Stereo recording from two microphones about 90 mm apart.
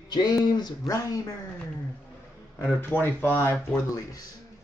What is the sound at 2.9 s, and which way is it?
Speech, 20° left (ahead or behind).